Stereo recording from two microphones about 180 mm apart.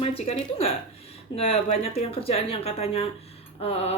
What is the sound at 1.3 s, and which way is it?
Speech, 35° left (ahead or behind).